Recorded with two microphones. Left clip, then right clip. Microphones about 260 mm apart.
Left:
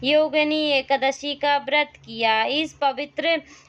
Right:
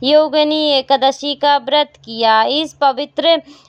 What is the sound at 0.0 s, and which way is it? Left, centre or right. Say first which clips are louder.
Speech: right 7 dB; right.